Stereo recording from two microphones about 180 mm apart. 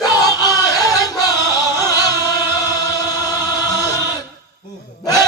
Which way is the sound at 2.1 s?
20° left (ahead or behind).